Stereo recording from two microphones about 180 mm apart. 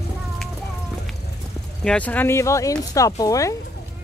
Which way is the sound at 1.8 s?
5° left (ahead or behind).